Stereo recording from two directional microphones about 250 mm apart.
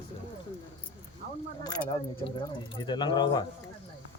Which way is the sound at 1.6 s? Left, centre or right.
Centre.